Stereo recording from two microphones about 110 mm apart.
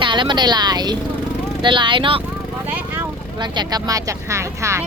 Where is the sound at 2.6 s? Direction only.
20° right (ahead or behind).